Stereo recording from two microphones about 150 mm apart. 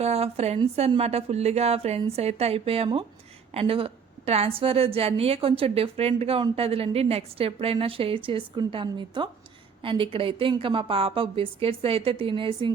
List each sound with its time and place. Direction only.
0.0 s a woman's voice: 45° right (ahead or behind)